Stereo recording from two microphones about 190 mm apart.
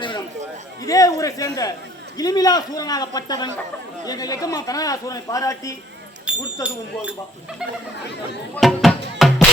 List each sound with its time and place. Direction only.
0.9 s a man's voice: 20° left (ahead or behind)
6.2 s speech: 5° right (ahead or behind)
8.5 s speech: centre (ahead or behind)
9.1 s music: centre (ahead or behind)